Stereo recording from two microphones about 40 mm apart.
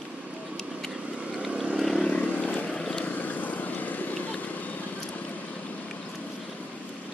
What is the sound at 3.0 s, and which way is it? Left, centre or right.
Vehicle, left.